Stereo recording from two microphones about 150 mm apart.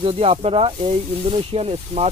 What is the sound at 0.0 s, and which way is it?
Speech, 40° right (ahead or behind).